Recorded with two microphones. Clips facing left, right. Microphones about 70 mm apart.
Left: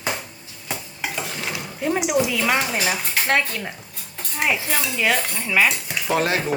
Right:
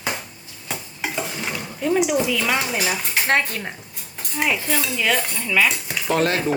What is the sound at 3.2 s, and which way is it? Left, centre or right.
Speech, right.